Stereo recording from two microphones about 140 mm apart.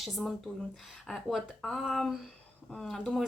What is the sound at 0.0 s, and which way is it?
Speech, centre (ahead or behind).